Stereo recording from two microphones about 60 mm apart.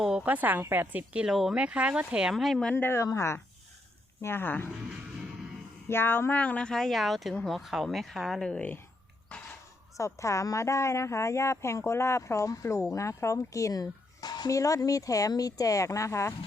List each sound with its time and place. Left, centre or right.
0.2 s a woman's voice: right
1.3 s speech: centre
1.5 s speech: centre
2.3 s speech: centre
2.7 s speech: left
4.2 s speech: left
5.9 s speech: left
6.3 s speech: left
6.7 s speech: centre
8.4 s speech: centre
10.0 s speech: left